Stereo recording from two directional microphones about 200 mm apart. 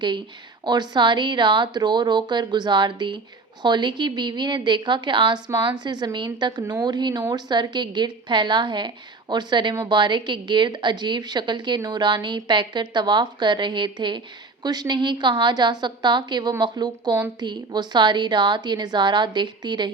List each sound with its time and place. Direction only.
0.6 s a woman's voice: 20° right (ahead or behind)